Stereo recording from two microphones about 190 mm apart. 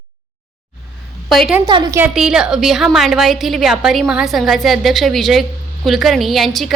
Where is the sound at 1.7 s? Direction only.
25° right (ahead or behind).